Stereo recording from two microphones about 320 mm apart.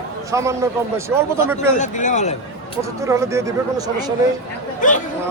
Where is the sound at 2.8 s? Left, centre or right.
Centre.